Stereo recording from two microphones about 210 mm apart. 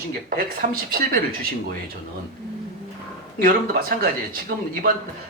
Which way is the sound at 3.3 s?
45° right (ahead or behind).